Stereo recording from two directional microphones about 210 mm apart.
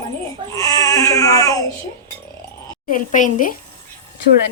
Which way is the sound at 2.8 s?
40° left (ahead or behind).